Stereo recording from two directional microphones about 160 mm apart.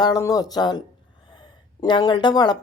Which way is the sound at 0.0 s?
20° left (ahead or behind).